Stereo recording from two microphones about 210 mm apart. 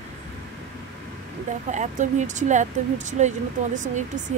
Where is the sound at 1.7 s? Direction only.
35° right (ahead or behind).